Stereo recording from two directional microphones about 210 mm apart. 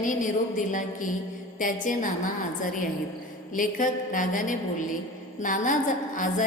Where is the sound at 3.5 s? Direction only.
40° left (ahead or behind).